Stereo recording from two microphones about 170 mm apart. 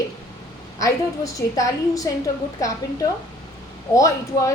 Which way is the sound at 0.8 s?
20° left (ahead or behind).